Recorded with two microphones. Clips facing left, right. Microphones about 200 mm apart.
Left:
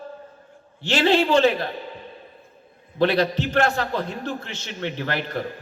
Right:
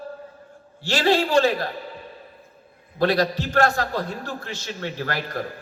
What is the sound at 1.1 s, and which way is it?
Speech, 40° right (ahead or behind).